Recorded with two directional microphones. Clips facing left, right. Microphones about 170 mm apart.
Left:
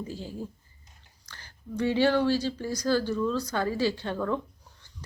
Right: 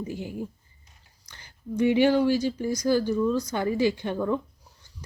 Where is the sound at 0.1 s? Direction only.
15° right (ahead or behind).